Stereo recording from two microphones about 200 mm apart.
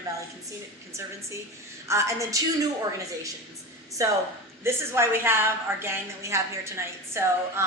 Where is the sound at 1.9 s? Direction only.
15° right (ahead or behind).